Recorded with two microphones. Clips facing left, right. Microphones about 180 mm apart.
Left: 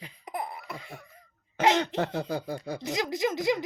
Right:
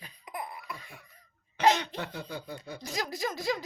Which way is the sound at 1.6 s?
50° left (ahead or behind).